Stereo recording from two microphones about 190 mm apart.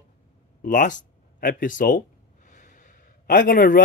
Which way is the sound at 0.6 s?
45° left (ahead or behind).